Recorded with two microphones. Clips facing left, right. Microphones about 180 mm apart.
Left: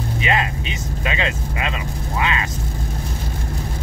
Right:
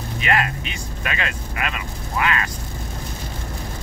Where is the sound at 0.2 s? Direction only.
20° left (ahead or behind).